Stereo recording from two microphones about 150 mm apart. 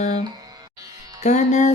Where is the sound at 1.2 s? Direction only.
55° left (ahead or behind).